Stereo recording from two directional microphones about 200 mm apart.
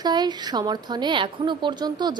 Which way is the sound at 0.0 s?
20° right (ahead or behind).